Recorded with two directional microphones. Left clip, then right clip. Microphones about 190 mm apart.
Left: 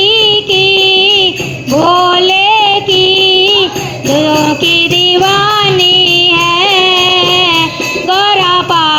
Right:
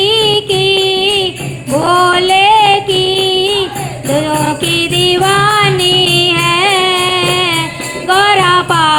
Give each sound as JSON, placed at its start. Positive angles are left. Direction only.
{"t": 0.0, "sound": "music", "side_deg": 15}
{"t": 1.8, "sound": "female singing", "side_deg": 15}
{"t": 4.1, "sound": "music", "side_deg": 15}